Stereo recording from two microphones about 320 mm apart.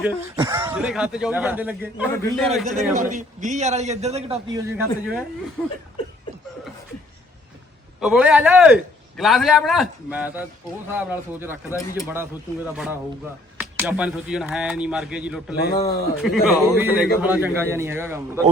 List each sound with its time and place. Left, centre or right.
0.0 s speech: centre
2.6 s a man's voice: right
5.6 s speech: centre
7.9 s a man's voice: centre
15.7 s speech: centre
16.2 s a man's voice: centre